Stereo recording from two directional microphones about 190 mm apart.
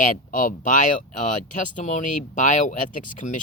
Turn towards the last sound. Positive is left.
turn(degrees=40)  # may be behind; listen again after turning